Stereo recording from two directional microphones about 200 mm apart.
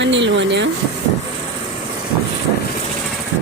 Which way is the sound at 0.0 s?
65° right (ahead or behind).